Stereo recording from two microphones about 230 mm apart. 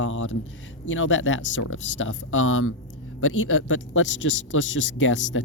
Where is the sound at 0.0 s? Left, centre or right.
Left.